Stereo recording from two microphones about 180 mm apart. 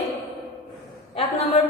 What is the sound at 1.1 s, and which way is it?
Speech, 35° left (ahead or behind).